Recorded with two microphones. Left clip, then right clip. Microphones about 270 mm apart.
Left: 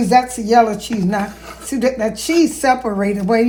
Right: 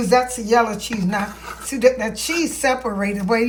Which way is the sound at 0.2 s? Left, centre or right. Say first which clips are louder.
Left 4 dB; right.